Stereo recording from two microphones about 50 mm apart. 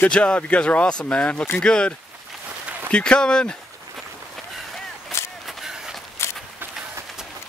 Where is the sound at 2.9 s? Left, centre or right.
Left.